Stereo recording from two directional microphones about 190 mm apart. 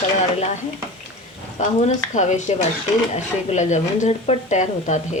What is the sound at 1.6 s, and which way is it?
Speech, 40° left (ahead or behind).